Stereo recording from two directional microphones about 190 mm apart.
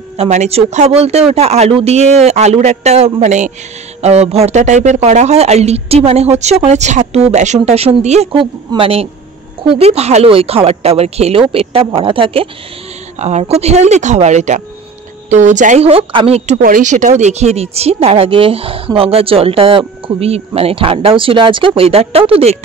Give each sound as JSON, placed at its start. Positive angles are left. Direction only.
{"t": 0.2, "sound": "speech", "side_deg": -35}